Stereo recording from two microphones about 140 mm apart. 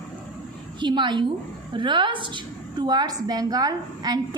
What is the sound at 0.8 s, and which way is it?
A woman's voice, 35° right (ahead or behind).